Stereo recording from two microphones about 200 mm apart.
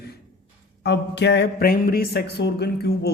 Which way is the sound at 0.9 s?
60° left (ahead or behind).